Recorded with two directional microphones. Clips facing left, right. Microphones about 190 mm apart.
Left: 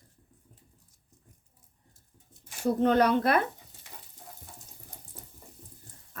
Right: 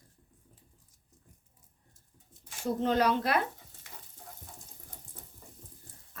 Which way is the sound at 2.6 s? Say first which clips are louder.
Left 4 dB; 60° left (ahead or behind).